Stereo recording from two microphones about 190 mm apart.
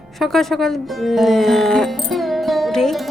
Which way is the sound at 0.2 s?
Centre (ahead or behind).